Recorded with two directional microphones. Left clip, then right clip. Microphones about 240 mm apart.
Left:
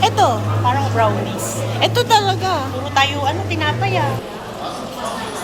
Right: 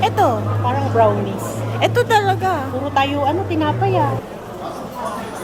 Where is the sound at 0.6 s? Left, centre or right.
Right.